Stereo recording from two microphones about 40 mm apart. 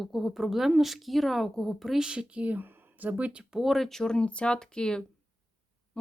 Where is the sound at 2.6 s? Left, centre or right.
Right.